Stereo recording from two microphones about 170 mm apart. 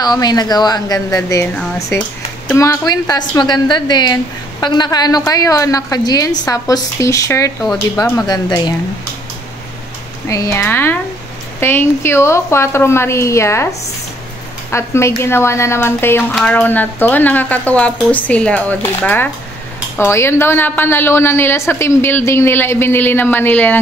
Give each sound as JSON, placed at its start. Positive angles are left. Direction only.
{"t": 0.0, "sound": "a woman's voice", "side_deg": 25}
{"t": 2.5, "sound": "a woman's voice", "side_deg": 15}
{"t": 7.6, "sound": "speech", "side_deg": 0}
{"t": 8.3, "sound": "a woman's voice", "side_deg": 25}
{"t": 10.2, "sound": "a woman's voice", "side_deg": 20}
{"t": 14.7, "sound": "a woman's voice", "side_deg": 15}